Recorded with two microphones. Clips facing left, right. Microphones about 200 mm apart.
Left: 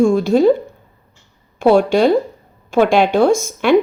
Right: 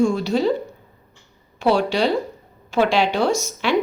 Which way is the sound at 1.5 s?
50° left (ahead or behind).